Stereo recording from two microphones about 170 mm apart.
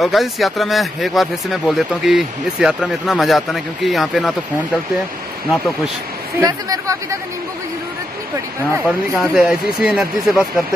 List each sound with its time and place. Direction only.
0.0 s speech: centre (ahead or behind)
6.4 s speech: 20° right (ahead or behind)
8.8 s speech: centre (ahead or behind)